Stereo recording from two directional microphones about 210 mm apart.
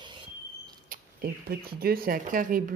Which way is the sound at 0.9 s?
45° right (ahead or behind).